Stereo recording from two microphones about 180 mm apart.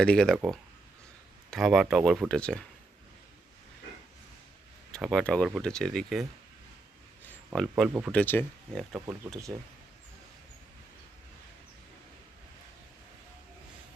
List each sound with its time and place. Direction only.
0.0 s speech: 5° left (ahead or behind)
4.9 s speech: centre (ahead or behind)
7.3 s a sound: centre (ahead or behind)
8.1 s speech: 10° left (ahead or behind)